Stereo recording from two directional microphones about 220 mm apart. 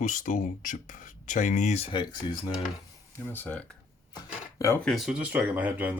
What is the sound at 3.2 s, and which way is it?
Speech, 10° left (ahead or behind).